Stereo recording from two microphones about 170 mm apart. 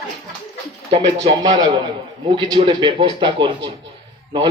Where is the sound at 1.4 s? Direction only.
25° right (ahead or behind).